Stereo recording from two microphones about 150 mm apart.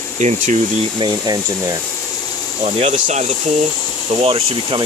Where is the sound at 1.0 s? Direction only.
30° right (ahead or behind).